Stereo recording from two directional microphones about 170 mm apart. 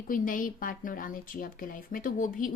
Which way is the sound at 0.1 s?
55° left (ahead or behind).